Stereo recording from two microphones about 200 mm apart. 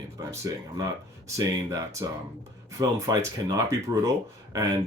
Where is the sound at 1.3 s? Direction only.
15° right (ahead or behind).